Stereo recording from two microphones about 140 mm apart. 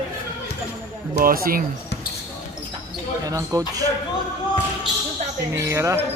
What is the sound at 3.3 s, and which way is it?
Speech, 25° right (ahead or behind).